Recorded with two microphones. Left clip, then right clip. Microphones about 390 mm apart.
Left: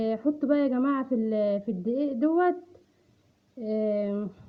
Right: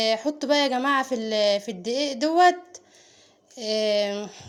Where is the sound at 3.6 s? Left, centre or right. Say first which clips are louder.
Right 5 dB; centre.